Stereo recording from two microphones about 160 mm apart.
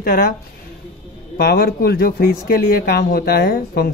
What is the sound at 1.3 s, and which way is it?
Speech, 75° left (ahead or behind).